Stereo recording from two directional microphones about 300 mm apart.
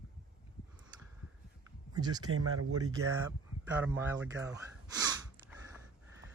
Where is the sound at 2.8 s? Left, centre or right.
Centre.